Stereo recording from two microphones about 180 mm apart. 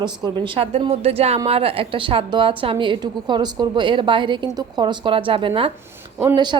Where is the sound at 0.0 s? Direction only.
30° right (ahead or behind).